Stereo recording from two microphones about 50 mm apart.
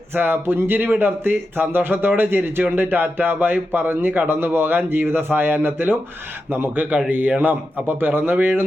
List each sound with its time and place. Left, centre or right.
0.1 s speech: right
7.1 s speech: right